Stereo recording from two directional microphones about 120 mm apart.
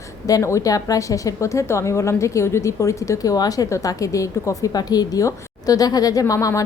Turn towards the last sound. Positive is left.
turn(degrees=25)  # may be behind; listen again after turning